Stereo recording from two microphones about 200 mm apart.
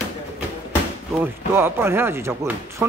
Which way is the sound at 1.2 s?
10° right (ahead or behind).